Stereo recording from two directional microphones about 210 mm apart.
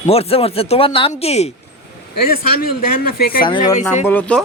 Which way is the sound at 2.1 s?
45° left (ahead or behind).